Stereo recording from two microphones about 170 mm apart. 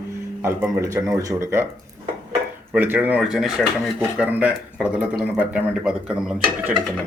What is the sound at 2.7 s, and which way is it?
Speech, 10° right (ahead or behind).